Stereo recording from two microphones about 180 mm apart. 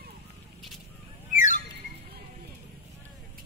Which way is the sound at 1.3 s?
45° left (ahead or behind).